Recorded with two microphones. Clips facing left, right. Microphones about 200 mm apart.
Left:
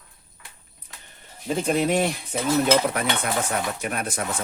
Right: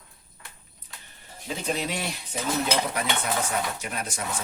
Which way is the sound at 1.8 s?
55° left (ahead or behind).